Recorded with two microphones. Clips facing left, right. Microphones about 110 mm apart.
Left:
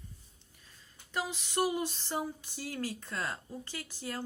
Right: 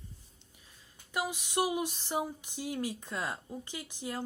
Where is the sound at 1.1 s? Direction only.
15° right (ahead or behind).